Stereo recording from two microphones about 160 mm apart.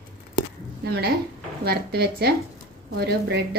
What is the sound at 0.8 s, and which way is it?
A woman's voice, 85° right.